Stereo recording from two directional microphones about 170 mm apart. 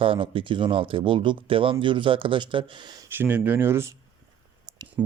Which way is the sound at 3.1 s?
10° right (ahead or behind).